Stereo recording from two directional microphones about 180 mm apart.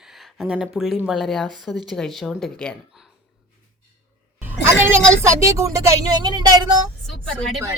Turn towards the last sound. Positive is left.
turn(degrees=5)  # may be behind; listen again after turning